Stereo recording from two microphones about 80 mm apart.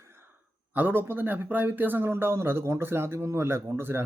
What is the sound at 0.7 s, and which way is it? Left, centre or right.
Speech, right.